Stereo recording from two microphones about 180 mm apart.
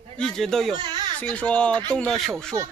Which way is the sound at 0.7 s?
25° right (ahead or behind).